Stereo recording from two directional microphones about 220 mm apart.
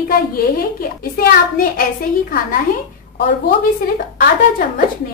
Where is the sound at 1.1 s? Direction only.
40° left (ahead or behind).